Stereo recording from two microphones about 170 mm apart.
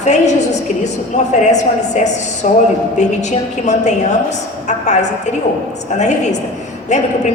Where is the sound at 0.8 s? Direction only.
45° left (ahead or behind).